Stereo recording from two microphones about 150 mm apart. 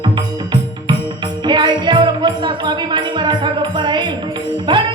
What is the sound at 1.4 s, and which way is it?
Music, 30° right (ahead or behind).